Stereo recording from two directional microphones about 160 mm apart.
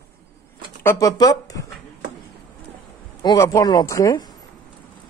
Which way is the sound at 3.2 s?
20° left (ahead or behind).